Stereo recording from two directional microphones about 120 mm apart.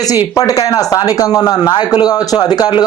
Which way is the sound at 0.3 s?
30° left (ahead or behind).